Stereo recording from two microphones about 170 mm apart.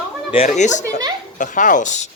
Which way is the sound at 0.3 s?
45° left (ahead or behind).